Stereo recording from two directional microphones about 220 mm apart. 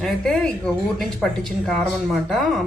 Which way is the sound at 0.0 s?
5° left (ahead or behind).